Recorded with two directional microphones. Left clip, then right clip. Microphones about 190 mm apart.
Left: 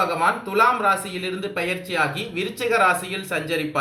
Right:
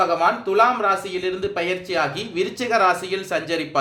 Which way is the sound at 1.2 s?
50° right (ahead or behind).